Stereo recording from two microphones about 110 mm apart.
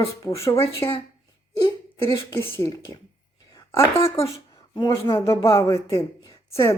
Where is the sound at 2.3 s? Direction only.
25° left (ahead or behind).